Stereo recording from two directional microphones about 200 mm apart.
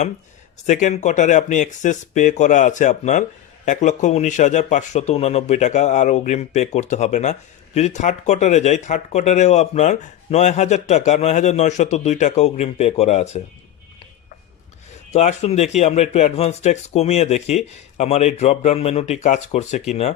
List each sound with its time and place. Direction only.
0.7 s speech: 35° left (ahead or behind)
15.1 s speech: 35° left (ahead or behind)